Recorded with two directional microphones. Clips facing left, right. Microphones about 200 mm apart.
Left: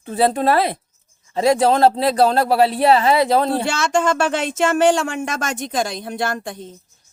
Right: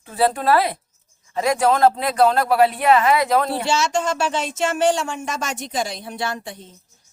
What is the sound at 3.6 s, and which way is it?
Speech, 55° left (ahead or behind).